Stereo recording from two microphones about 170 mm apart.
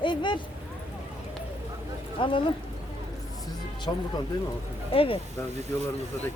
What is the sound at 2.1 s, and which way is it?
Speech, 30° left (ahead or behind).